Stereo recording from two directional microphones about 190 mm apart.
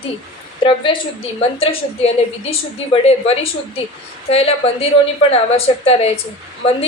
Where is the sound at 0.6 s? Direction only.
25° left (ahead or behind).